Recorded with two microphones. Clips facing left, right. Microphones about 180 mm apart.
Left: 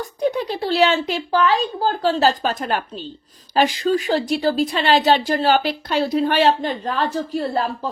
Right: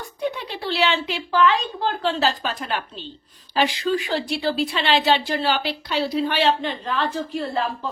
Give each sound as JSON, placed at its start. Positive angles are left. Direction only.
{"t": 0.0, "sound": "a woman's voice", "side_deg": 40}